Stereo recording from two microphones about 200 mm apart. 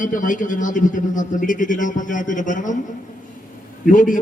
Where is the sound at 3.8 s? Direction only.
40° left (ahead or behind).